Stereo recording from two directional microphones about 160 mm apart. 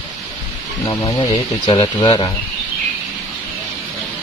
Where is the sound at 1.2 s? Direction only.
35° left (ahead or behind).